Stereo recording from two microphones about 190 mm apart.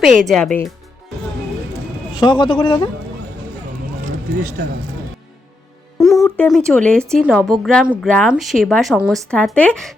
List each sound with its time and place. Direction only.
0.0 s speech: centre (ahead or behind)
2.1 s speech: 25° left (ahead or behind)
6.0 s a sound: centre (ahead or behind)
6.3 s speech: 5° left (ahead or behind)